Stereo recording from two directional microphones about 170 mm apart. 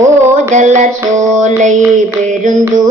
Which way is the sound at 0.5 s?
45° right (ahead or behind).